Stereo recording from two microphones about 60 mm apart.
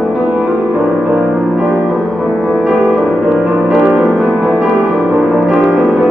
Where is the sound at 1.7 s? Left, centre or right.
Centre.